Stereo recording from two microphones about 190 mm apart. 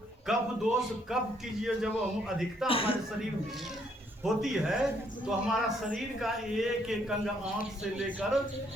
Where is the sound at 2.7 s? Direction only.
30° left (ahead or behind).